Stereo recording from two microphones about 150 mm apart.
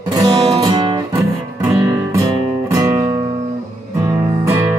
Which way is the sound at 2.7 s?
20° right (ahead or behind).